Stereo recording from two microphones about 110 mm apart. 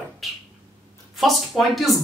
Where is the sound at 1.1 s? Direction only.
Centre (ahead or behind).